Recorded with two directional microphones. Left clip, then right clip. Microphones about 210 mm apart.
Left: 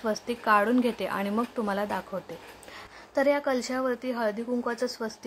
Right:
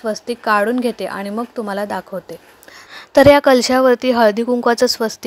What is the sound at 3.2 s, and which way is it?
Speech, 40° right (ahead or behind).